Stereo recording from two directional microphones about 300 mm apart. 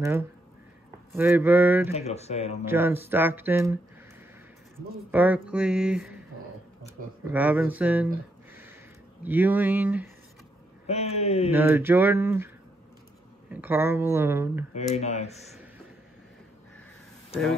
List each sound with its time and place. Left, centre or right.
0.0 s speech: centre
2.0 s a man's voice: left
2.6 s speech: centre
5.1 s speech: centre
7.2 s speech: centre
9.2 s speech: centre
10.9 s a man's voice: left
11.5 s speech: centre
13.5 s speech: centre
14.7 s a man's voice: left